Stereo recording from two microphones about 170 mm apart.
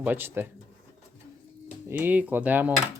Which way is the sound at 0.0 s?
10° right (ahead or behind).